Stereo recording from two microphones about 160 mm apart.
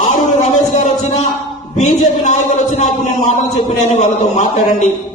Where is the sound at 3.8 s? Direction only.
45° left (ahead or behind).